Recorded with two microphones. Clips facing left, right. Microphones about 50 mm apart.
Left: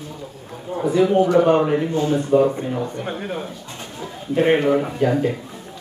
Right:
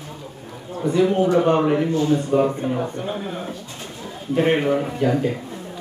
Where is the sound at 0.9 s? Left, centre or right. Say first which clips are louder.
Left 2 dB; centre.